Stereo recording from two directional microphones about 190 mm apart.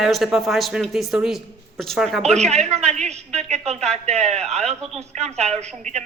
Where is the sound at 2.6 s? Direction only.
35° right (ahead or behind).